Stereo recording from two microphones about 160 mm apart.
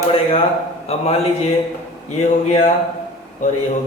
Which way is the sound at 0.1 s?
35° left (ahead or behind).